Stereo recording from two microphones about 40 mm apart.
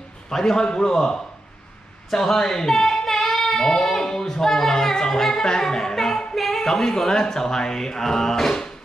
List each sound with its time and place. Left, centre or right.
0.3 s a man's voice: centre
2.1 s a sound: centre
6.3 s speech: centre